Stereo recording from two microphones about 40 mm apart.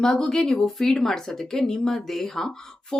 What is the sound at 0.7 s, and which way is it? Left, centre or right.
Speech, centre.